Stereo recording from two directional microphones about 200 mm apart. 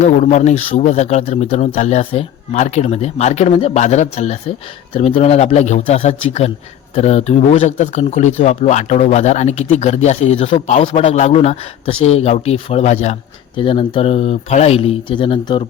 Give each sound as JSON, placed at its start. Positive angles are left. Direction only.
{"t": 0.0, "sound": "speech", "side_deg": 35}